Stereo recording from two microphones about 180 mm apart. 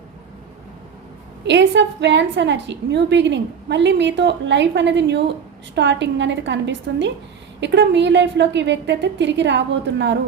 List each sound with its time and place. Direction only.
1.5 s a woman's voice: 80° right